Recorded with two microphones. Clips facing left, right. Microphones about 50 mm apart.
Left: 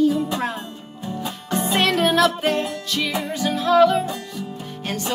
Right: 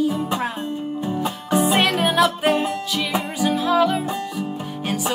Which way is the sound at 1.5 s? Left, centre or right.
Centre.